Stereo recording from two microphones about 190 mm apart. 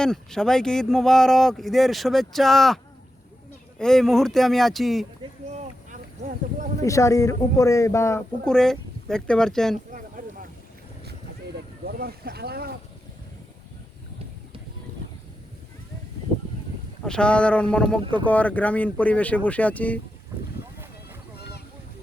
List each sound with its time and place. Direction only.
0.0 s speech: 5° left (ahead or behind)
5.5 s a sound: 40° right (ahead or behind)
6.8 s speech: 15° left (ahead or behind)
8.4 s speech: 5° left (ahead or behind)
9.9 s a sound: 45° right (ahead or behind)
11.9 s speech: 55° right (ahead or behind)
17.0 s speech: 5° left (ahead or behind)